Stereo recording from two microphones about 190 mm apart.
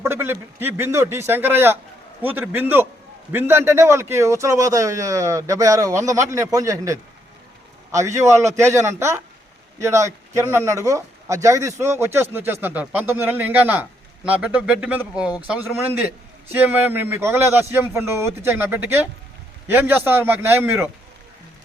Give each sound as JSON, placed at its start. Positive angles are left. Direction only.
{"t": 0.0, "sound": "speech", "side_deg": -10}